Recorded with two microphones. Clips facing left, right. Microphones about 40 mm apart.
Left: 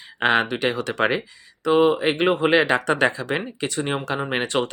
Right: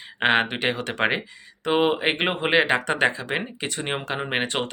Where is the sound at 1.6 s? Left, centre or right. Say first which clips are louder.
Left 3 dB; right.